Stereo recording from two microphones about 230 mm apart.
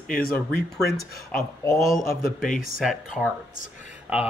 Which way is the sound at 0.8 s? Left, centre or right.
Left.